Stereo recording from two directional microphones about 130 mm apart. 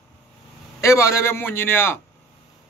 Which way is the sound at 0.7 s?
20° left (ahead or behind).